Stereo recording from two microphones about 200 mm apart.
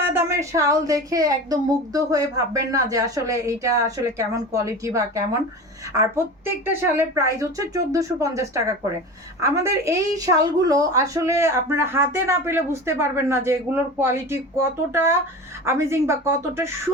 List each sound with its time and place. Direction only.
0.1 s a woman's voice: 10° right (ahead or behind)